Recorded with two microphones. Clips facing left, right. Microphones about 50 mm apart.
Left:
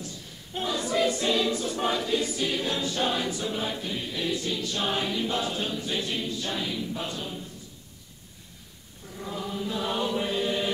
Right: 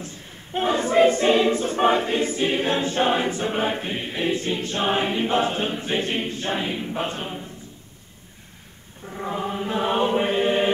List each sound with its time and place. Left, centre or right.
0.0 s choir: right
9.0 s chant: right